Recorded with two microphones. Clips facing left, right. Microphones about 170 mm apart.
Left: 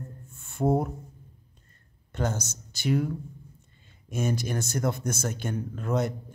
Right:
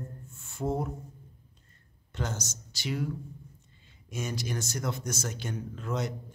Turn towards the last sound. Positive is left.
turn(degrees=55)  # may be behind; listen again after turning